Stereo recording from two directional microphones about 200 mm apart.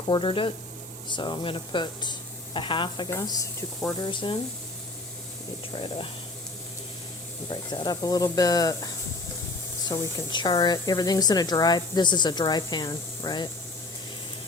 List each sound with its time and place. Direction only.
0.1 s speech: 25° left (ahead or behind)
5.7 s speech: 25° left (ahead or behind)
7.5 s speech: 20° left (ahead or behind)
9.9 s speech: 20° left (ahead or behind)